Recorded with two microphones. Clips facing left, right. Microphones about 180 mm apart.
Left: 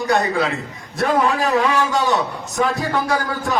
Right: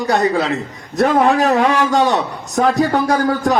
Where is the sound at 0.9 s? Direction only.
45° right (ahead or behind).